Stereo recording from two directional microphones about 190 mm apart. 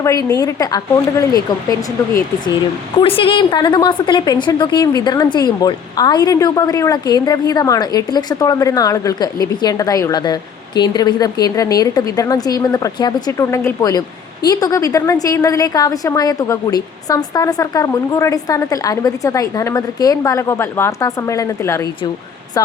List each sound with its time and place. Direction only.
0.0 s a woman's voice: 20° left (ahead or behind)
3.0 s a woman's voice: 30° left (ahead or behind)